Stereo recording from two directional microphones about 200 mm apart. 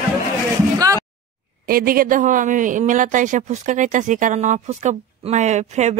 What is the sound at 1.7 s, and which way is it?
Speech, 45° right (ahead or behind).